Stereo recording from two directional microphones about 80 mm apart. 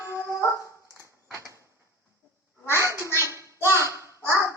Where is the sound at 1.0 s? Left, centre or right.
Right.